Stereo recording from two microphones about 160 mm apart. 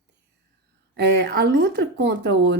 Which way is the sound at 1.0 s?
90° right.